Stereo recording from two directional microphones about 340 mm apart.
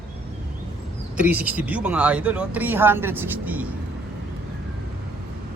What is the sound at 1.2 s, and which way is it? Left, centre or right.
Speech, centre.